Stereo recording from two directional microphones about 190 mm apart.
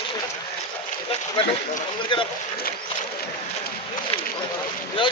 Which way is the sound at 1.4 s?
25° left (ahead or behind).